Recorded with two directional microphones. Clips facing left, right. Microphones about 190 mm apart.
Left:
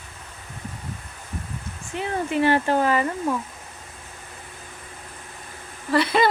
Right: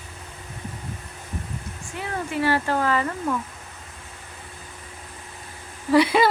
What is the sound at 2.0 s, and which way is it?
Speech, 20° left (ahead or behind).